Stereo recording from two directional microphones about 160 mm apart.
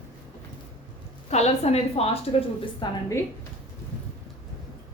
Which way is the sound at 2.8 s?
30° left (ahead or behind).